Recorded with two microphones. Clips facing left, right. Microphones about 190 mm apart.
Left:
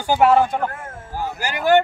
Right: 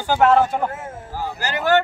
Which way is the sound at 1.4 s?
15° left (ahead or behind).